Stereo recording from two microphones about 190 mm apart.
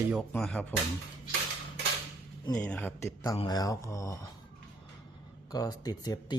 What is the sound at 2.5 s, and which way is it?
Speech, 10° left (ahead or behind).